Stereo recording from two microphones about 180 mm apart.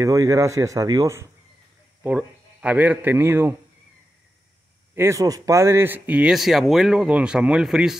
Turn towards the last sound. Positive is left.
turn(degrees=-5)  # may be behind; listen again after turning